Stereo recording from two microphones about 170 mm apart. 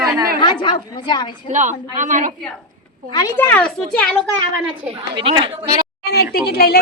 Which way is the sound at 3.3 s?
10° left (ahead or behind).